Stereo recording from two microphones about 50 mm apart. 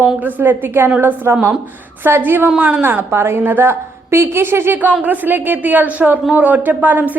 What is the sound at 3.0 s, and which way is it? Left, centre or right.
A woman's voice, right.